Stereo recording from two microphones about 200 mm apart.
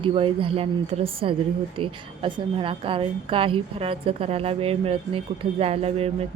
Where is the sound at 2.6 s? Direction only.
25° right (ahead or behind).